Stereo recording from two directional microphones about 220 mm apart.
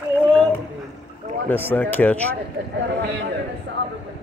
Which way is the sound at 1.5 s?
10° left (ahead or behind).